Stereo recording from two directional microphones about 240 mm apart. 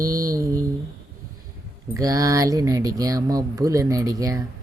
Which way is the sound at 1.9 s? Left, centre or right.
Centre.